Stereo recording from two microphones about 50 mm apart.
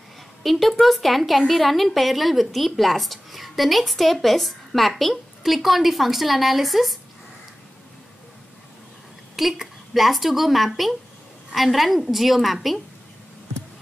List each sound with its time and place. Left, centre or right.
0.4 s speech: centre
9.4 s speech: centre